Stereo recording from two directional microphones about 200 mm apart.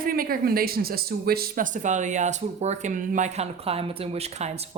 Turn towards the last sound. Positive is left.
turn(degrees=-35)  # may be behind; listen again after turning